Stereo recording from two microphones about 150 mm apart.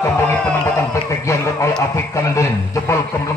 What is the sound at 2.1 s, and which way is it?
Speech, 20° left (ahead or behind).